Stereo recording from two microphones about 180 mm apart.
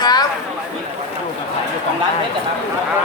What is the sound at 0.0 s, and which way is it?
Chatter, 20° left (ahead or behind).